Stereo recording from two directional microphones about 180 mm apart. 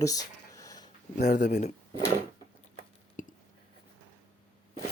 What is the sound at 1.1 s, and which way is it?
Speech, 55° left (ahead or behind).